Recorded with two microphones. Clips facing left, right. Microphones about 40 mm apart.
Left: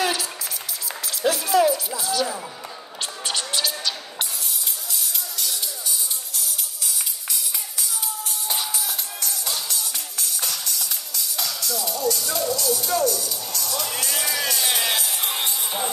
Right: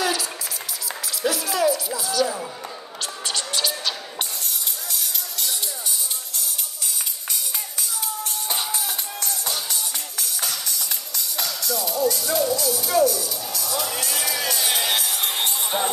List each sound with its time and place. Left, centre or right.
0.0 s a sound: left
1.2 s music: left
3.0 s a sound: centre
8.5 s music: right
11.3 s music: centre
15.4 s music: right